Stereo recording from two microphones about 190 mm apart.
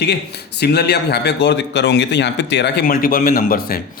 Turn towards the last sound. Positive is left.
turn(degrees=50)  # may be behind; listen again after turning